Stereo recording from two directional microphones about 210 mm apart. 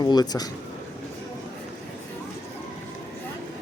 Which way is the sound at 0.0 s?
20° left (ahead or behind).